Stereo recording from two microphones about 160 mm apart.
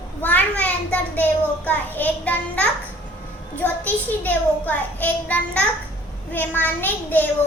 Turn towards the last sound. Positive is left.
turn(degrees=10)  # may be behind; listen again after turning